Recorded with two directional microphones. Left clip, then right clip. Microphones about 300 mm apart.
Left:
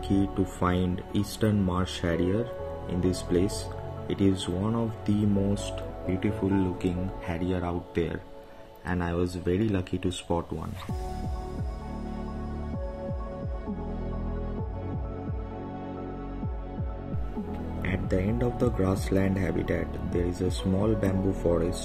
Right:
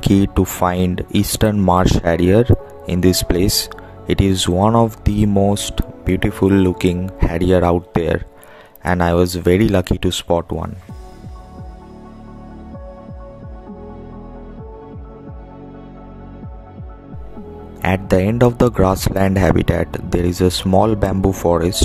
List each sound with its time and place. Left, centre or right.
0.2 s speech: right
17.8 s speech: right